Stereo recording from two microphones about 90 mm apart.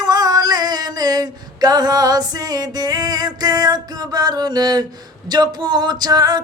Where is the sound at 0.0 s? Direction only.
50° right (ahead or behind).